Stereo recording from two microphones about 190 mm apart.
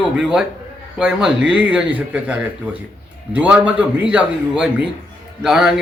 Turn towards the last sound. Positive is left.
turn(degrees=0)  # may be behind; listen again after turning